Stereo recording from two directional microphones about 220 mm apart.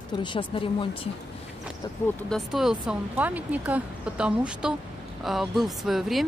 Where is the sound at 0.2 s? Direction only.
20° left (ahead or behind).